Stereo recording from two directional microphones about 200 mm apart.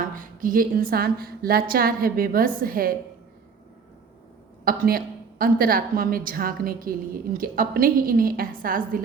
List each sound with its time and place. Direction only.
0.2 s a woman's voice: 45° right (ahead or behind)
4.6 s a woman's voice: 45° right (ahead or behind)